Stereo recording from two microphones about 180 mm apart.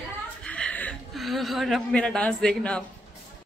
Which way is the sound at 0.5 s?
5° left (ahead or behind).